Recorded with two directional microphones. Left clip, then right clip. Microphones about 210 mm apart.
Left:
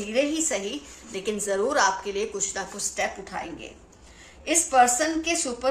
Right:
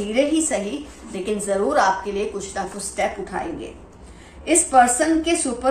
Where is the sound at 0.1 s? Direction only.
45° left (ahead or behind).